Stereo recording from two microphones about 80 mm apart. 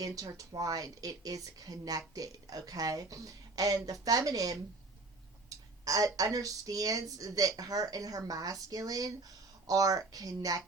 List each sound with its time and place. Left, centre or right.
0.0 s a woman's voice: right